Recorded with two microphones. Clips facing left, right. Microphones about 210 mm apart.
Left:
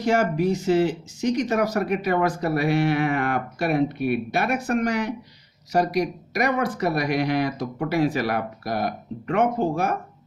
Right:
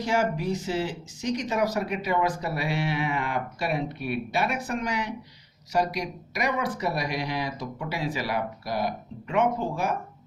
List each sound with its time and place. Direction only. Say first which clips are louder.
0.0 s speech: left 5 dB; 55° left (ahead or behind)